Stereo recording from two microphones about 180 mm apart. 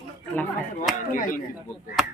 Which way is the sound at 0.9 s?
45° left (ahead or behind).